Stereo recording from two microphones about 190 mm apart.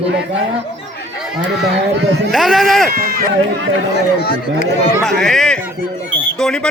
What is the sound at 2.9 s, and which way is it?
Speech, 50° right (ahead or behind).